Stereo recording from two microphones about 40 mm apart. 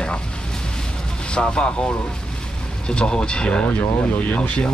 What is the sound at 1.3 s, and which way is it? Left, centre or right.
Speech, left.